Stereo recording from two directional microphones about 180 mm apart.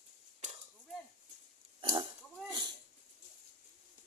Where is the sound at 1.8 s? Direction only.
25° right (ahead or behind).